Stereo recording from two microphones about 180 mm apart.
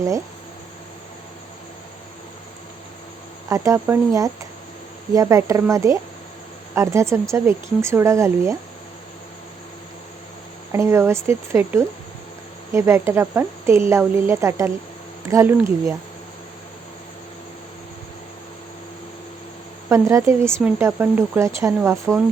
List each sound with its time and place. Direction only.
3.5 s speech: 15° right (ahead or behind)
10.7 s speech: 15° right (ahead or behind)
19.9 s speech: 15° right (ahead or behind)